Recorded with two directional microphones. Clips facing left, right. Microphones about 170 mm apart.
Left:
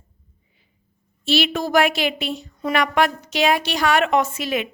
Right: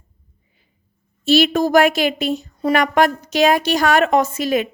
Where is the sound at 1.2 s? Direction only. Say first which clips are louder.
Right 6 dB; 45° right (ahead or behind).